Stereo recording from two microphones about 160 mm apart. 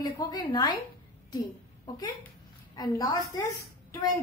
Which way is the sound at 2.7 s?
25° left (ahead or behind).